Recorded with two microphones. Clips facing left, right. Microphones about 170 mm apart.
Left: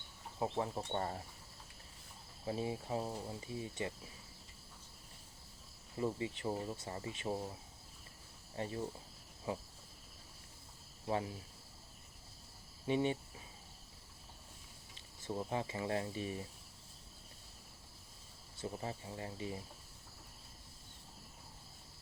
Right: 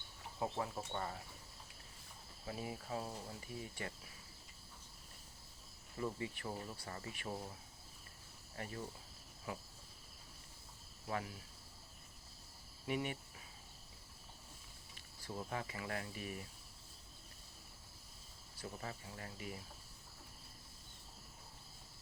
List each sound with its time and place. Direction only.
0.3 s speech: 25° left (ahead or behind)
2.5 s speech: 25° left (ahead or behind)
6.0 s speech: 20° left (ahead or behind)
8.5 s speech: 25° left (ahead or behind)
11.1 s speech: 25° left (ahead or behind)
12.8 s speech: 25° left (ahead or behind)
14.9 s speech: 25° left (ahead or behind)
18.5 s speech: 25° left (ahead or behind)